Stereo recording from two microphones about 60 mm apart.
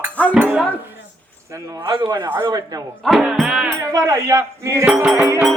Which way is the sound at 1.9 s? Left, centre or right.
Right.